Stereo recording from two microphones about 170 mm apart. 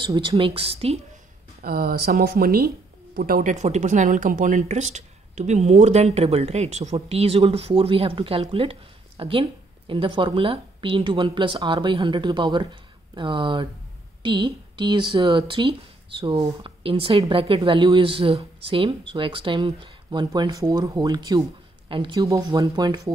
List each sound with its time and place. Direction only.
0.0 s a woman's voice: 30° right (ahead or behind)
1.6 s speech: 60° right (ahead or behind)
3.4 s a woman's voice: 45° right (ahead or behind); by 23.1 s 25° right (ahead or behind)